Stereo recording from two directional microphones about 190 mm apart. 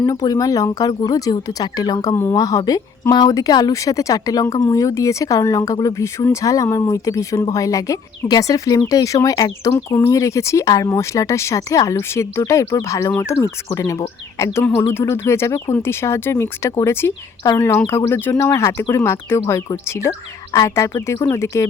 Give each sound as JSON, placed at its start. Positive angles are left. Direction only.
{"t": 0.0, "sound": "speech", "side_deg": 20}